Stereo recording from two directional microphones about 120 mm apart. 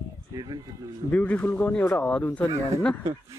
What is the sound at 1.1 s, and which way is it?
Speech, 10° left (ahead or behind).